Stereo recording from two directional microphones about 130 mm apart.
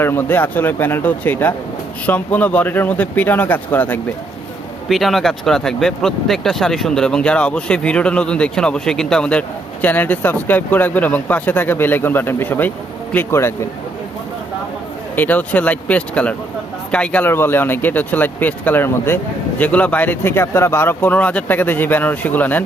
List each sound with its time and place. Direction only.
0.0 s speech: 15° left (ahead or behind)
4.9 s speech: centre (ahead or behind); by 13.7 s 20° left (ahead or behind)
15.1 s speech: 15° left (ahead or behind)